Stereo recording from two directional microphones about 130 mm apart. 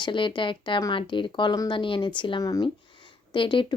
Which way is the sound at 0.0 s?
40° left (ahead or behind).